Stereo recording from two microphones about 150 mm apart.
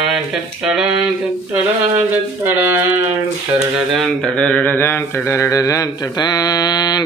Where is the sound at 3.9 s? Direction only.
5° left (ahead or behind).